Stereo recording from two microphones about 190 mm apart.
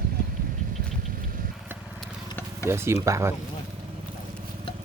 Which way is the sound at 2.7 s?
15° right (ahead or behind).